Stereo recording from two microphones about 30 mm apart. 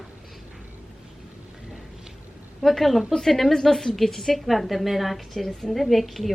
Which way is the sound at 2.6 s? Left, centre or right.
Centre.